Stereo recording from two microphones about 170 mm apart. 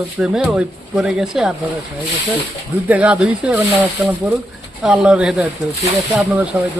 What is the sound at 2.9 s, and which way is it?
Speech, 5° right (ahead or behind).